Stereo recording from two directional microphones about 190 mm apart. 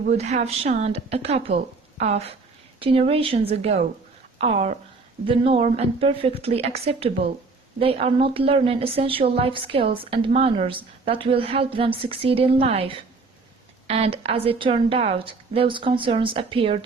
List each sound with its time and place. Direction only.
0.1 s a woman's voice: 35° right (ahead or behind)